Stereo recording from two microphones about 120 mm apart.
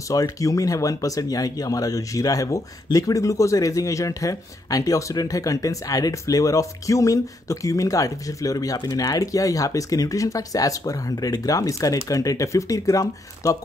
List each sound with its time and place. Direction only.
0.1 s speech: 30° left (ahead or behind)